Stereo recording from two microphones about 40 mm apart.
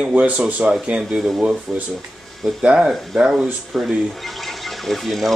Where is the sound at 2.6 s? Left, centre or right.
Right.